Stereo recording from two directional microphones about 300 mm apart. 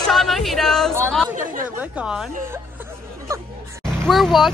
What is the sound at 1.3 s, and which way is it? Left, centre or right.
Chatter, right.